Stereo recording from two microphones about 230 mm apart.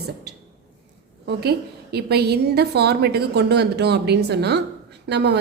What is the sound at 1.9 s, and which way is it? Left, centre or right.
A woman's voice, right.